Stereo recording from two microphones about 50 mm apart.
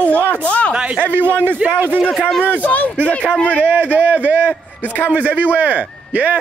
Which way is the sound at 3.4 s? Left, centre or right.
Right.